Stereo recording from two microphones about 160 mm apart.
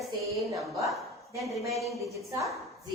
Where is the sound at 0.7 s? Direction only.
20° right (ahead or behind).